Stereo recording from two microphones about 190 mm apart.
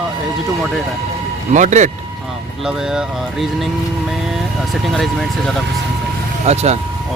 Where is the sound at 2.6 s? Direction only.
5° right (ahead or behind).